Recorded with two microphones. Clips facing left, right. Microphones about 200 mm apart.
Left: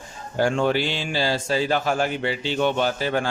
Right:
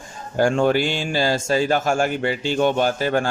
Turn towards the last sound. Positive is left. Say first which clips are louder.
# right 3 dB
turn(degrees=-45)  # may be behind; listen again after turning